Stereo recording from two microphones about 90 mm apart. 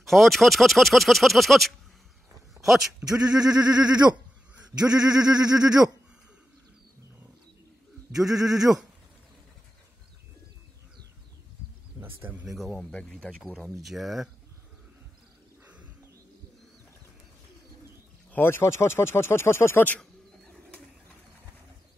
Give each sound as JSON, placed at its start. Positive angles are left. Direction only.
{"t": 0.0, "sound": "speech", "side_deg": 5}
{"t": 2.5, "sound": "a sound", "side_deg": 0}
{"t": 3.0, "sound": "speech", "side_deg": -15}
{"t": 3.3, "sound": "a sound", "side_deg": -45}
{"t": 4.6, "sound": "speech", "side_deg": -10}
{"t": 8.1, "sound": "speech", "side_deg": -5}
{"t": 12.2, "sound": "speech", "side_deg": -20}
{"t": 12.4, "sound": "speech", "side_deg": 0}
{"t": 12.9, "sound": "speech", "side_deg": 10}
{"t": 13.7, "sound": "speech", "side_deg": 0}
{"t": 15.6, "sound": "bird", "side_deg": -15}
{"t": 18.3, "sound": "speech", "side_deg": 25}